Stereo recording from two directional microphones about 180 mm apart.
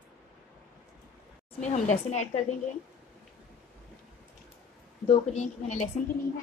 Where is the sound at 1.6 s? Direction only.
40° left (ahead or behind).